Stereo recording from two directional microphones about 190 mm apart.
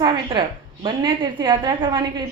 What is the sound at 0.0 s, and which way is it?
A woman's voice, 25° right (ahead or behind).